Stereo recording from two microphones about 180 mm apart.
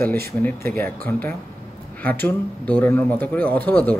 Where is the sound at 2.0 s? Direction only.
10° left (ahead or behind).